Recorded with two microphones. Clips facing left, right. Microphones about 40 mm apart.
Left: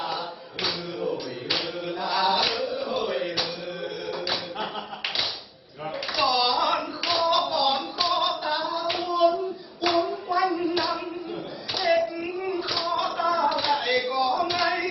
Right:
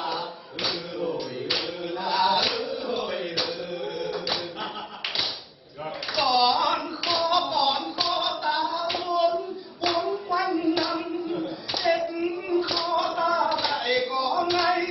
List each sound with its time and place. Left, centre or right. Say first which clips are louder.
0.0 s choir: even; centre
2.0 s chant: right 1 dB; centre
4.1 s music: even; centre
6.1 s clapping: right 2 dB; centre
9.9 s hands: left 2 dB; centre
12.9 s a sound: right 1 dB; centre